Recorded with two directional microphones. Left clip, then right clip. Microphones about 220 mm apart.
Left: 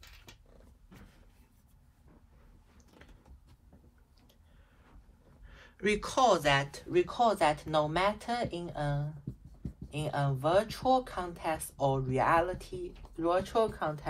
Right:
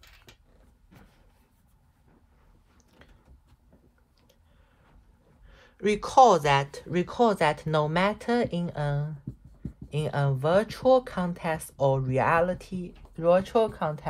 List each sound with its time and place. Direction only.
5.5 s speech: 5° right (ahead or behind); by 14.0 s 40° right (ahead or behind)